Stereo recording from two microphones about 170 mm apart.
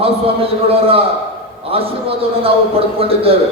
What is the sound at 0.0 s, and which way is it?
A man's voice, 35° right (ahead or behind).